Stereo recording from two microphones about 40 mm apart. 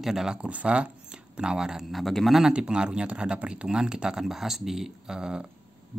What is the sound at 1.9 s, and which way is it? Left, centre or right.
Speech, centre.